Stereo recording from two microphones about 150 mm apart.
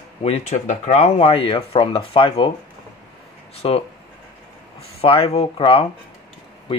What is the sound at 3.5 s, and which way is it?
Speech, 40° left (ahead or behind).